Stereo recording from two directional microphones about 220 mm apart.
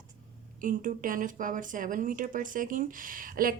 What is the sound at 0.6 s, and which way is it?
A woman's voice, 35° right (ahead or behind).